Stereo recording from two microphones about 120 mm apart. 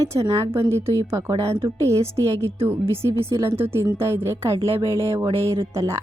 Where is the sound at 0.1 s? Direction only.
25° right (ahead or behind).